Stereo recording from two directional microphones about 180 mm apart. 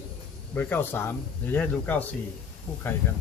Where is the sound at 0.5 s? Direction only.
10° left (ahead or behind).